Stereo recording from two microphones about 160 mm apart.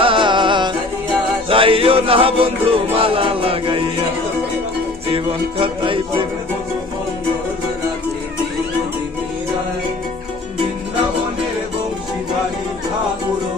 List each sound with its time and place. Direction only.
0.0 s music: 30° right (ahead or behind)
5.1 s music: 35° right (ahead or behind)